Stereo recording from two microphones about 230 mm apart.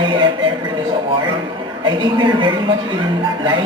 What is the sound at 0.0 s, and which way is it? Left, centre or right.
A man's voice, right.